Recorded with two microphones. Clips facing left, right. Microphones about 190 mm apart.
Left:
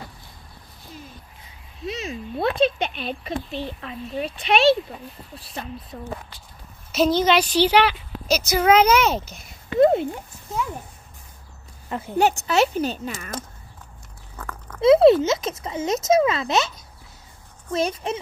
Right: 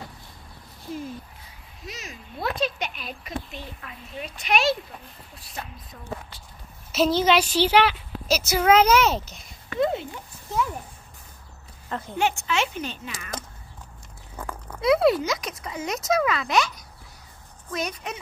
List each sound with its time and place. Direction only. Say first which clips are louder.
1.9 s speech: left 10 dB; 30° left (ahead or behind)
5.9 s speech: left 8 dB; 30° left (ahead or behind)
6.9 s a woman's voice: left 2 dB; 5° right (ahead or behind)
9.8 s speech: left 8 dB; 50° left (ahead or behind)
12.2 s speech: left 6 dB; 40° left (ahead or behind)
14.8 s speech: left 6 dB; 25° left (ahead or behind)